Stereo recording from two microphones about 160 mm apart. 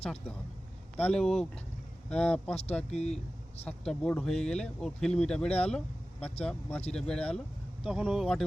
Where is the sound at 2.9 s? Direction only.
45° left (ahead or behind).